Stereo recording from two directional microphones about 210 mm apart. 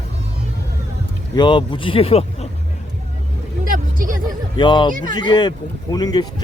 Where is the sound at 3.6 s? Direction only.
40° right (ahead or behind).